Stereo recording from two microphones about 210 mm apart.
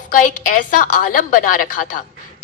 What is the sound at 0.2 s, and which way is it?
A woman's voice, 40° left (ahead or behind).